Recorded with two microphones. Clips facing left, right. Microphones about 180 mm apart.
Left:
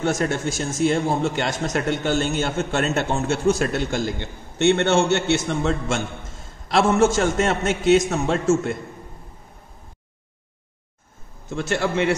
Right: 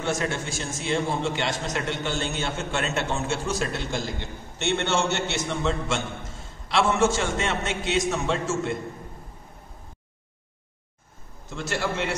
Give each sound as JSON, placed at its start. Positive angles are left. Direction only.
{"t": 0.0, "sound": "a man's voice", "side_deg": 40}
{"t": 11.5, "sound": "a man's voice", "side_deg": 55}